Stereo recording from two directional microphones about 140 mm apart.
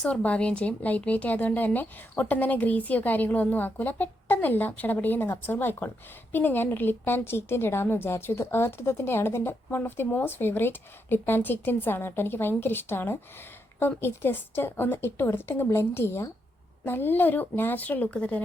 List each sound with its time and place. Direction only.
0.0 s a woman's voice: 10° left (ahead or behind)